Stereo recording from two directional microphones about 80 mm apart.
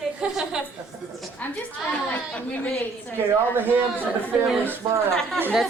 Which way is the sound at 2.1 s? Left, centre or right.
Centre.